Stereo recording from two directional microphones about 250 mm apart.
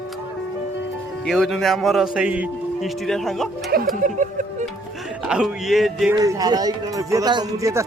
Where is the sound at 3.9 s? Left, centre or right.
Right.